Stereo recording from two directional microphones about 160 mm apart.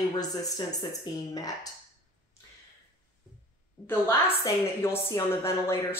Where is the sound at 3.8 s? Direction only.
15° left (ahead or behind).